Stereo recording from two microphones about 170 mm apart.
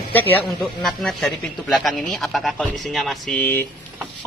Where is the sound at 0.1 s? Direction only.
10° left (ahead or behind).